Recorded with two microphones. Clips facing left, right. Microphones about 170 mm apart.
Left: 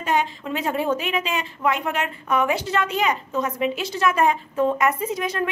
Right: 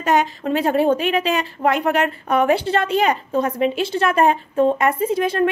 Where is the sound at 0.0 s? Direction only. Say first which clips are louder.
Right 5 dB; 40° right (ahead or behind).